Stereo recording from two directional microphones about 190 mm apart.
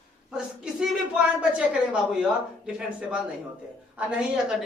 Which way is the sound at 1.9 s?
5° right (ahead or behind).